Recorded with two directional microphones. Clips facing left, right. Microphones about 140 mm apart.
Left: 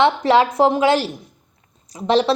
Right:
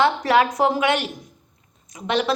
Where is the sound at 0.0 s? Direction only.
25° left (ahead or behind).